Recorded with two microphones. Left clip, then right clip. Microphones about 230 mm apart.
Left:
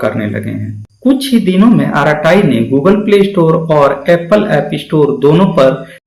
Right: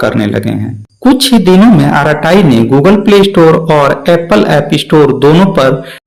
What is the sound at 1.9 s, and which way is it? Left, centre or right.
A man's voice, right.